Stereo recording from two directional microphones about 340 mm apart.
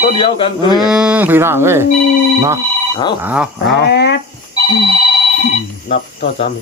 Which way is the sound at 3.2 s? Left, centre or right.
Centre.